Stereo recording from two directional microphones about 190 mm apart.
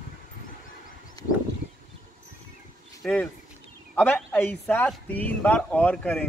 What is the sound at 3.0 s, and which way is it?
Speech, 5° left (ahead or behind).